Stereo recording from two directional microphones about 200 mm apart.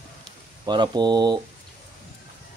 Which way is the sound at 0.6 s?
20° right (ahead or behind).